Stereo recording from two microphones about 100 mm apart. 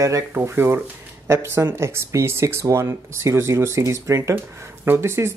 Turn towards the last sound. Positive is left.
turn(degrees=-25)  # may be behind; listen again after turning